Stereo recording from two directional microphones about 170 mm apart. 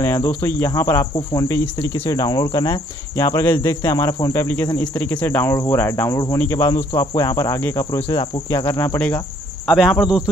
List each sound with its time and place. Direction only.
0.0 s speech: 15° left (ahead or behind)
9.7 s speech: centre (ahead or behind)